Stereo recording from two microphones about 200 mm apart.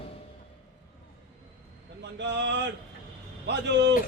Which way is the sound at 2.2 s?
60° right (ahead or behind).